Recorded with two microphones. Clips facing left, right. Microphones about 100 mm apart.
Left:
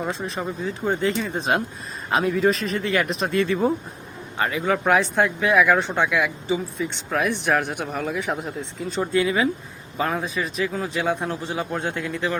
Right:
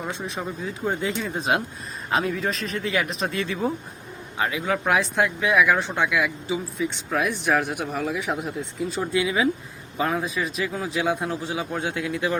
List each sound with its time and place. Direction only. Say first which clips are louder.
0.0 s speech: left 3 dB; centre (ahead or behind)